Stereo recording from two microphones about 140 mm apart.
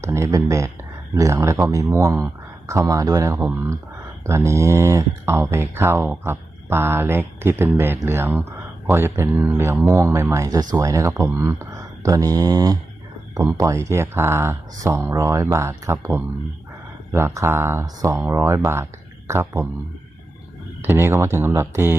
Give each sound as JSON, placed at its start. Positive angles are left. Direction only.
{"t": 0.0, "sound": "speech", "side_deg": -20}
{"t": 20.8, "sound": "speech", "side_deg": -20}